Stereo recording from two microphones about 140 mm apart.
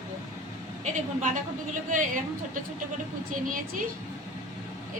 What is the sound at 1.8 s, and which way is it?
Speech, 70° right (ahead or behind).